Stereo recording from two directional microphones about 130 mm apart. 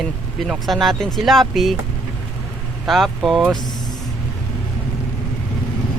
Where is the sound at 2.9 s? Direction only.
Centre (ahead or behind).